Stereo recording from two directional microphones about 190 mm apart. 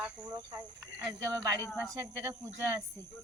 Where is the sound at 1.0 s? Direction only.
20° right (ahead or behind).